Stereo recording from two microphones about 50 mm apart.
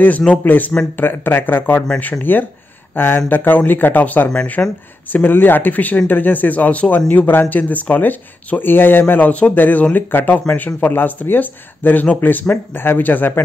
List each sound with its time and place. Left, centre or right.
0.4 s speech: left